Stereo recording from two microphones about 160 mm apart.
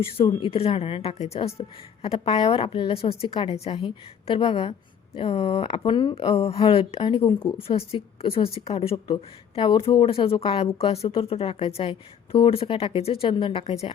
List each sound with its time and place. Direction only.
0.2 s a woman's voice: 30° left (ahead or behind)